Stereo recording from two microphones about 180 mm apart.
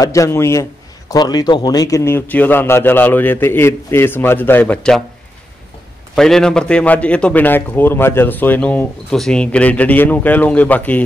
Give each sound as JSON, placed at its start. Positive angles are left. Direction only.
{"t": 0.0, "sound": "a man's voice", "side_deg": 15}
{"t": 6.1, "sound": "a man's voice", "side_deg": 5}